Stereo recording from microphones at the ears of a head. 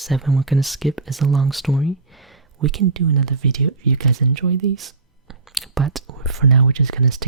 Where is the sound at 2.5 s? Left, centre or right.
Right.